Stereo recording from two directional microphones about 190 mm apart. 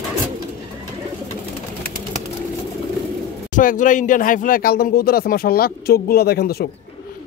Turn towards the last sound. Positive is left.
turn(degrees=55)  # may be behind; listen again after turning